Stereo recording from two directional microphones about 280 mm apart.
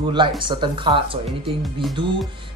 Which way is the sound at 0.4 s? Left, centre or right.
Centre.